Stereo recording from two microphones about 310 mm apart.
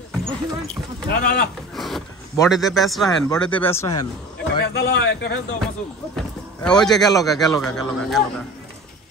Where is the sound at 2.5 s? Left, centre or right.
Centre.